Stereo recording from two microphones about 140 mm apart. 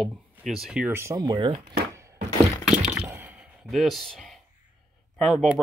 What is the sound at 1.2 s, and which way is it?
Speech, 30° right (ahead or behind).